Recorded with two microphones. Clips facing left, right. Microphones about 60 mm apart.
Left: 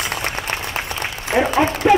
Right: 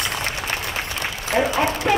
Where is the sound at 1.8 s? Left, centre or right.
Centre.